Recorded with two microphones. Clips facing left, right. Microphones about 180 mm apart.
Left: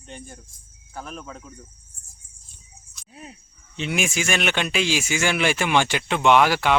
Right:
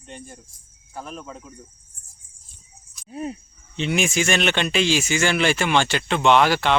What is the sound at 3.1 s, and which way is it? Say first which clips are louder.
Livestock: right 13 dB; 45° right (ahead or behind).